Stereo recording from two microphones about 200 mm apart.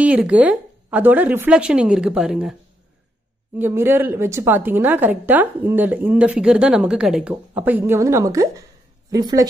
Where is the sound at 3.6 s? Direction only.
10° right (ahead or behind).